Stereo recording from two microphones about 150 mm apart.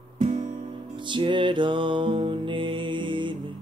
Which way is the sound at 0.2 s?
50° right (ahead or behind).